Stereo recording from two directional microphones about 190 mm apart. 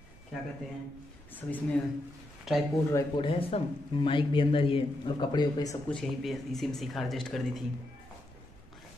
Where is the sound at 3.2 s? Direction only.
30° left (ahead or behind).